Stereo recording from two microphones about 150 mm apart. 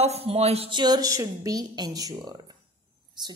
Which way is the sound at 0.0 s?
45° right (ahead or behind).